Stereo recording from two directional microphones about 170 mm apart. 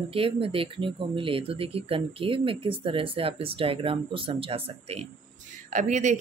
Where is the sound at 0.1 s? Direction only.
35° right (ahead or behind).